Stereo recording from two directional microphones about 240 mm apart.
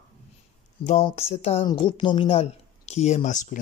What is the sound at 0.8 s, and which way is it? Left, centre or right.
A woman's voice, left.